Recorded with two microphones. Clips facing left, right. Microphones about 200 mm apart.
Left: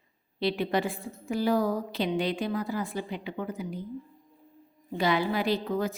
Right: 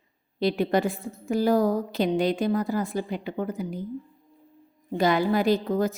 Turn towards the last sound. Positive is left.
turn(degrees=-40)  # may be behind; listen again after turning